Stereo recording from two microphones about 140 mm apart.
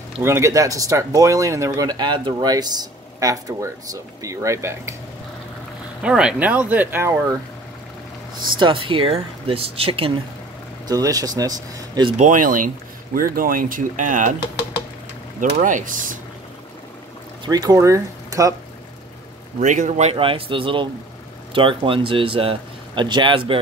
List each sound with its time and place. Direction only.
0.2 s speech: 20° right (ahead or behind)
6.0 s speech: 5° right (ahead or behind)
8.5 s speech: 35° right (ahead or behind)
10.9 s speech: 25° right (ahead or behind)
12.2 s speech: 70° right (ahead or behind)
15.6 s speech: 70° right (ahead or behind)
17.5 s speech: 25° right (ahead or behind)
19.6 s speech: 60° right (ahead or behind); by 23.6 s 40° right (ahead or behind)